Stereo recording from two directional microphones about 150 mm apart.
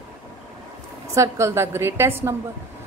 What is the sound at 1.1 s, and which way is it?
A woman's voice, 20° right (ahead or behind).